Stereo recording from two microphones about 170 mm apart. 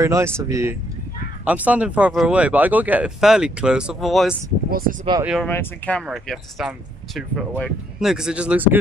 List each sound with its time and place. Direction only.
0.0 s speech: 15° right (ahead or behind); by 4.4 s centre (ahead or behind)
4.6 s speech: 60° right (ahead or behind)
5.2 s speech: 5° right (ahead or behind)
5.5 s speech: 10° left (ahead or behind)
6.0 s speech: centre (ahead or behind)